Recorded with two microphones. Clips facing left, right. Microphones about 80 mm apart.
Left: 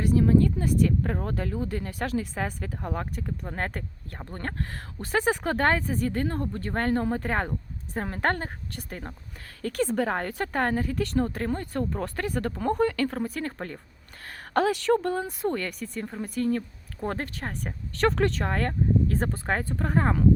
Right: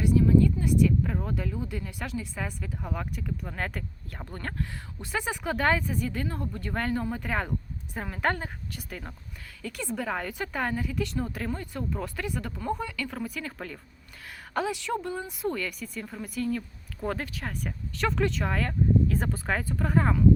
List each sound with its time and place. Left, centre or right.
0.0 s speech: left
4.7 s speech: left
9.6 s speech: left
13.1 s speech: left
14.5 s speech: left
15.3 s speech: left
16.0 s speech: left
17.9 s speech: left